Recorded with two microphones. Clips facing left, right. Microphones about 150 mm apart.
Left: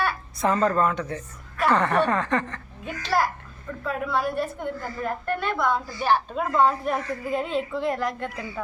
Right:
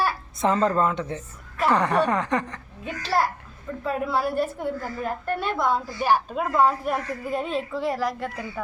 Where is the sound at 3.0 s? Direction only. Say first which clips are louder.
Even; 30° right (ahead or behind).